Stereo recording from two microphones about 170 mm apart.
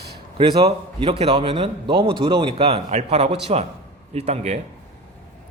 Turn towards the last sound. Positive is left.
turn(degrees=-40)  # may be behind; listen again after turning